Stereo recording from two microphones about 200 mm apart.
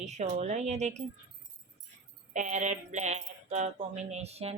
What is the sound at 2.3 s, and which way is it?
Speech, 40° right (ahead or behind).